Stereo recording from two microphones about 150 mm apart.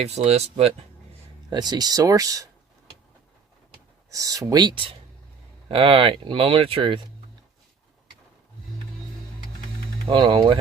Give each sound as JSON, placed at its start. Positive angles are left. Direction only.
{"t": 0.0, "sound": "speech", "side_deg": -45}
{"t": 1.5, "sound": "speech", "side_deg": -30}
{"t": 4.1, "sound": "speech", "side_deg": -20}
{"t": 10.1, "sound": "speech", "side_deg": -30}